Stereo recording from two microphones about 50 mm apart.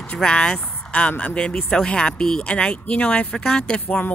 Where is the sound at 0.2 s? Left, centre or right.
Centre.